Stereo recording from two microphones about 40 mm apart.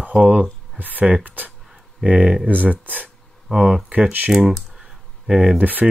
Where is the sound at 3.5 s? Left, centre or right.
Centre.